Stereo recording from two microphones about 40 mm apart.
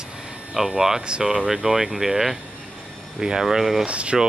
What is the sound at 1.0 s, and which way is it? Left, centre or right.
Speech, right.